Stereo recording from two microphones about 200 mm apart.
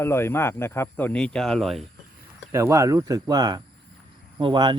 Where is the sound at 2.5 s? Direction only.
15° right (ahead or behind).